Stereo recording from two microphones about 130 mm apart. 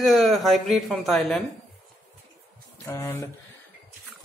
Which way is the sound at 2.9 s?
20° left (ahead or behind).